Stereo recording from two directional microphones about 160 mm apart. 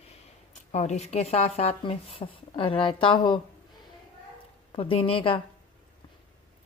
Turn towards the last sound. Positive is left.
turn(degrees=35)  # may be behind; listen again after turning